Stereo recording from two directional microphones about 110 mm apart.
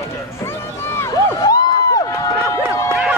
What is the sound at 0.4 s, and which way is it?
Run, 25° left (ahead or behind).